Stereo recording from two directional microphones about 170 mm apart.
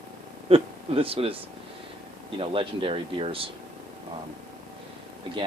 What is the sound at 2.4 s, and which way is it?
Speech, 30° right (ahead or behind).